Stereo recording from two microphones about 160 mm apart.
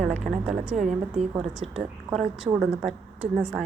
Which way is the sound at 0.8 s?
45° right (ahead or behind).